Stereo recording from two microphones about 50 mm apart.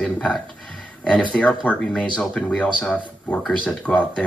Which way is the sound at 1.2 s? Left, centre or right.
Left.